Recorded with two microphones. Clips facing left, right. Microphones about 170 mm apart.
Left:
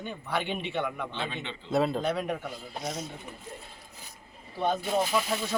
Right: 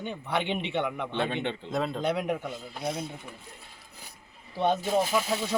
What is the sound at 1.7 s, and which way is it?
Speech, 5° left (ahead or behind).